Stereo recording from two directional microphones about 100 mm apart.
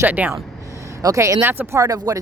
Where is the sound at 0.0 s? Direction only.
15° right (ahead or behind).